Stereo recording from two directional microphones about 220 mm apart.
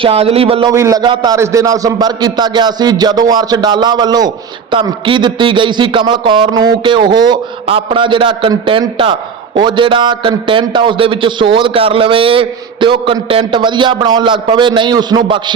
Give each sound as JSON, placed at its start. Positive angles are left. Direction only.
{"t": 0.0, "sound": "a man's voice", "side_deg": -25}